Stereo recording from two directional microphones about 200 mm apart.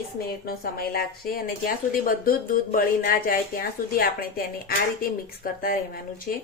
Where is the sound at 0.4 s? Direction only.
50° left (ahead or behind).